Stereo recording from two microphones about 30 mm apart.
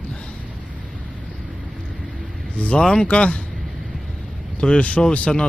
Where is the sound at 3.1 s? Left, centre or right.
Left.